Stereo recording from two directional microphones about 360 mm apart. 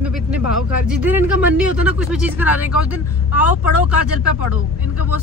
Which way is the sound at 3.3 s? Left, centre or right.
Left.